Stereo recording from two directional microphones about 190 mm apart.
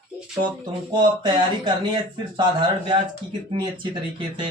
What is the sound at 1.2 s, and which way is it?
Speech, 25° right (ahead or behind).